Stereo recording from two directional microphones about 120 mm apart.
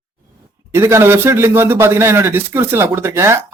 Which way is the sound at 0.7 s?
25° right (ahead or behind).